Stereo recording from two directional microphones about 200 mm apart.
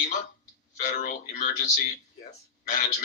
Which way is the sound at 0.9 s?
40° left (ahead or behind).